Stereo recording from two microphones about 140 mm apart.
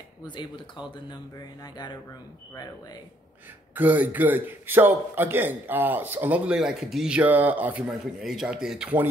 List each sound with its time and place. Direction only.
0.9 s speech: 30° left (ahead or behind)
3.7 s a man's voice: 10° right (ahead or behind)